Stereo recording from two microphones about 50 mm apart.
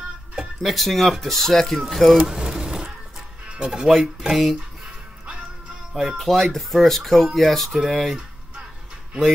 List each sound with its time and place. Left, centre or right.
0.6 s speech: centre
2.3 s a sound: centre
3.5 s speech: centre
6.1 s speech: centre